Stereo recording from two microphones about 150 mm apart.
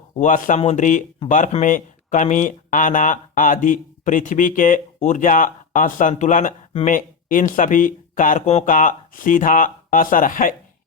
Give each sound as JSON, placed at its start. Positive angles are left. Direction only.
{"t": 0.2, "sound": "speech", "side_deg": 55}